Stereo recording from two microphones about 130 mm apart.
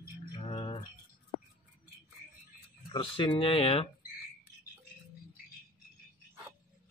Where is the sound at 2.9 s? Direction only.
40° left (ahead or behind).